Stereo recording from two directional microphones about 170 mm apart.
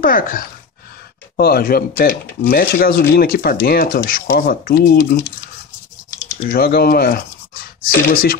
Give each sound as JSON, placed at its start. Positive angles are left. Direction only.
{"t": 0.0, "sound": "speech", "side_deg": 55}
{"t": 6.5, "sound": "speech", "side_deg": 60}